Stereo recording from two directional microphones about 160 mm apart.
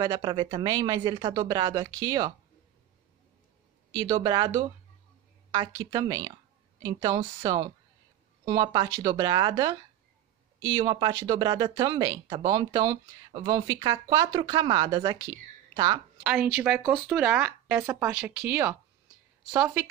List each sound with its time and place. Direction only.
0.0 s speech: 25° right (ahead or behind)
3.9 s a woman's voice: 25° right (ahead or behind)
16.3 s speech: 10° right (ahead or behind)